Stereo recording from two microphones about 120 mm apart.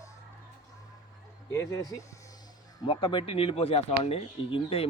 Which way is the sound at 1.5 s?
30° left (ahead or behind).